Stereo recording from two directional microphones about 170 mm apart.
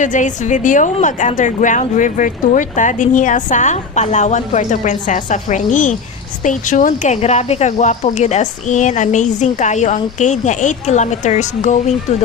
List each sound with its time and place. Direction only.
0.0 s speech: 45° left (ahead or behind)